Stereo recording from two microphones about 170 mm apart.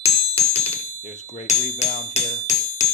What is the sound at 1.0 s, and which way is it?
Speech, 45° left (ahead or behind).